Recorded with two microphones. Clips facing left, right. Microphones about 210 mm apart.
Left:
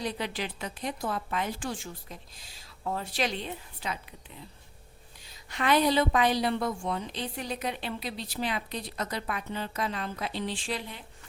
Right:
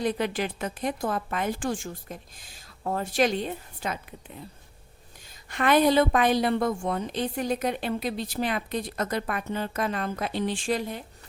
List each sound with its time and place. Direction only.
0.0 s a woman's voice: 50° right (ahead or behind)
5.2 s a woman's voice: 50° right (ahead or behind)